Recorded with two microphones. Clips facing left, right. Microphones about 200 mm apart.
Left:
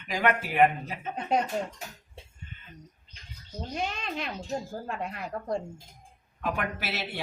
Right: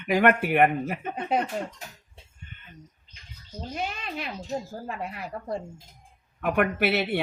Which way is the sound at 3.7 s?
5° right (ahead or behind).